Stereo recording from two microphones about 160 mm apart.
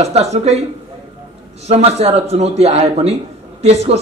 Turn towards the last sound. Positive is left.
turn(degrees=-40)  # may be behind; listen again after turning